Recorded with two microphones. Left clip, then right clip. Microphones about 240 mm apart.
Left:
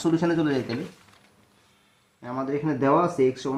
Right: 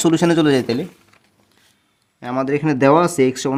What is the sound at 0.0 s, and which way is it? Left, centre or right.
Speech, right.